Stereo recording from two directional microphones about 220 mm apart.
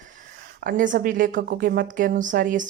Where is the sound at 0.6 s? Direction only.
40° right (ahead or behind).